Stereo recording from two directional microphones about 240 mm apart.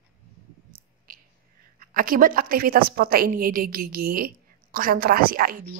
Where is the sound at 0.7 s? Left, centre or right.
Right.